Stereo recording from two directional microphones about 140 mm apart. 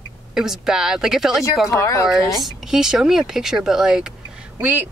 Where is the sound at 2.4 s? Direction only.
5° right (ahead or behind).